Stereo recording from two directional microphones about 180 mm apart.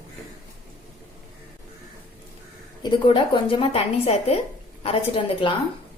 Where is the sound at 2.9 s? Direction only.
30° left (ahead or behind).